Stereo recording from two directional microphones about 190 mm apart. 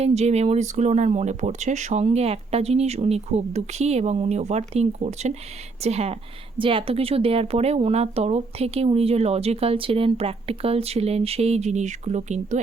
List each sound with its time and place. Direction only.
0.0 s speech: 35° right (ahead or behind)